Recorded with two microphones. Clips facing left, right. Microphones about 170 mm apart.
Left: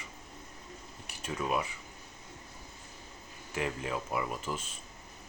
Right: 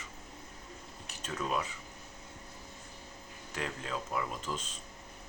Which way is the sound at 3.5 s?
10° left (ahead or behind).